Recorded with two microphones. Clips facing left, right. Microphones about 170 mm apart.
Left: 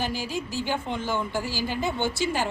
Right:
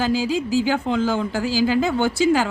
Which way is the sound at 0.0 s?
90° right.